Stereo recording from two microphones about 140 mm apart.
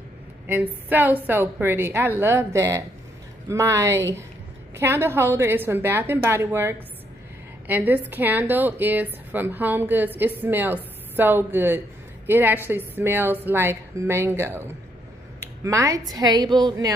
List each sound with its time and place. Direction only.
0.5 s a woman's voice: 15° right (ahead or behind); by 16.9 s 30° right (ahead or behind)